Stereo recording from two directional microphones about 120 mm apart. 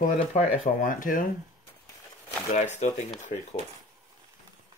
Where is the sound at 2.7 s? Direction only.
90° left.